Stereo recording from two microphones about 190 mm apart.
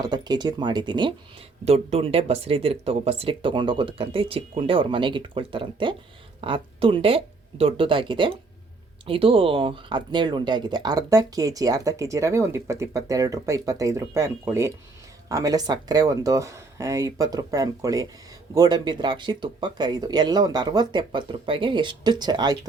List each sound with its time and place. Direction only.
0.0 s speech: 20° right (ahead or behind)